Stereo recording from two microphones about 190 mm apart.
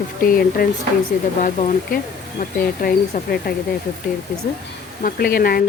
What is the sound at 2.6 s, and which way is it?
Speech, 50° left (ahead or behind).